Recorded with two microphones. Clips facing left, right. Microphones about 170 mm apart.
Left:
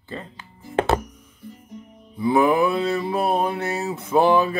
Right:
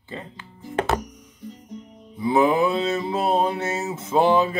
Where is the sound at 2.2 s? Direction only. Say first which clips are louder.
Left 1 dB; 25° right (ahead or behind).